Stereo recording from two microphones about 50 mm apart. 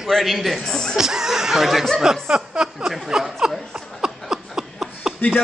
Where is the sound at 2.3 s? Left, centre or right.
Centre.